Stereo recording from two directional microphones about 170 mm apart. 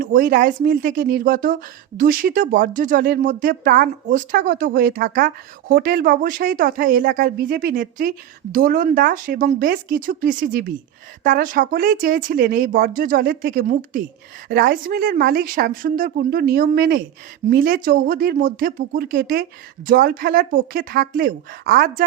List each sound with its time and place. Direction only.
0.0 s speech: 60° right (ahead or behind)